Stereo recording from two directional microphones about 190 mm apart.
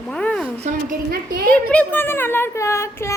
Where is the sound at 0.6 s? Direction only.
50° right (ahead or behind).